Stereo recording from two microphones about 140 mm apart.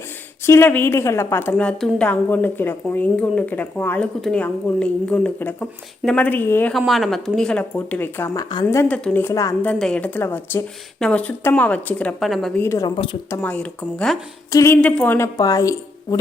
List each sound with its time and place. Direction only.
0.4 s a woman's voice: 15° left (ahead or behind)
6.7 s a woman's voice: centre (ahead or behind); by 8.6 s 30° left (ahead or behind)
8.6 s a woman's voice: 15° left (ahead or behind)
9.2 s a woman's voice: 20° left (ahead or behind)
9.6 s a woman's voice: 5° left (ahead or behind)
12.5 s a woman's voice: 20° left (ahead or behind)
14.5 s a woman's voice: 20° left (ahead or behind)
14.8 s a woman's voice: 10° left (ahead or behind)
15.4 s speech: 25° left (ahead or behind)